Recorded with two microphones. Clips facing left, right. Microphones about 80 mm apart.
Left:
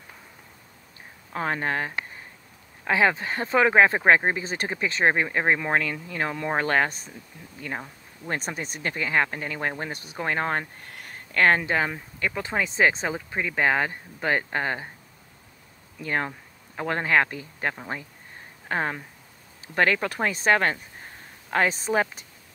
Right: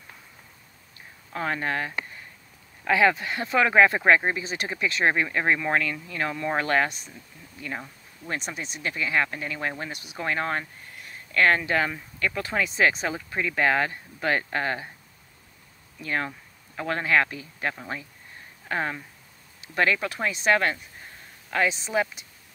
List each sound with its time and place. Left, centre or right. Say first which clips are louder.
1.3 s speech: left 1 dB; left
4.4 s speech: left 1 dB; left
10.6 s speech: left 2 dB; left
11.3 s speech: left 1 dB; left
16.0 s speech: left 1 dB; left